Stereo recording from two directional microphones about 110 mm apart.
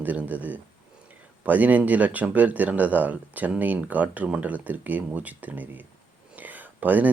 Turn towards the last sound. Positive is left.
turn(degrees=-15)  # may be behind; listen again after turning